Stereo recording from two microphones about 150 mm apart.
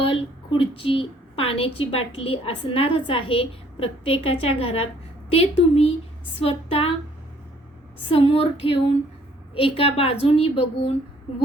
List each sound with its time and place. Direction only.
0.0 s a woman's voice: 35° left (ahead or behind)
8.1 s a woman's voice: 40° left (ahead or behind)